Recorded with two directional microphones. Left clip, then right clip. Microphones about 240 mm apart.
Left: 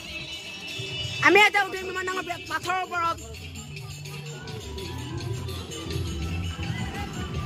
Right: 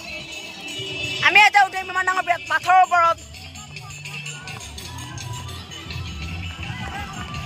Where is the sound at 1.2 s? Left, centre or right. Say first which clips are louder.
Right 5 dB; centre.